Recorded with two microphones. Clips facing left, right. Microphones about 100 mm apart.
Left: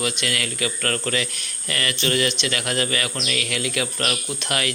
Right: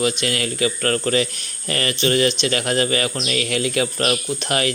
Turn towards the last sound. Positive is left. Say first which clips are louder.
# right 5 dB
turn(degrees=-30)  # may be behind; listen again after turning